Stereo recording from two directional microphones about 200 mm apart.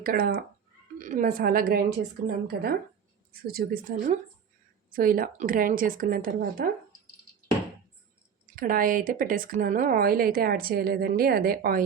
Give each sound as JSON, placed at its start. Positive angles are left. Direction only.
{"t": 0.0, "sound": "speech", "side_deg": -45}
{"t": 8.5, "sound": "speech", "side_deg": -45}